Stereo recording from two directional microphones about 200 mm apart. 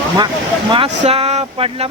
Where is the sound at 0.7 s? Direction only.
30° right (ahead or behind).